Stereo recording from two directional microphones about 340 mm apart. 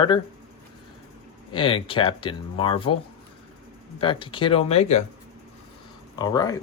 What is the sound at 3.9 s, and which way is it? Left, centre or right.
Speech, centre.